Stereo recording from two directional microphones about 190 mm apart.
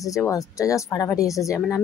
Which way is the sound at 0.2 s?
15° left (ahead or behind).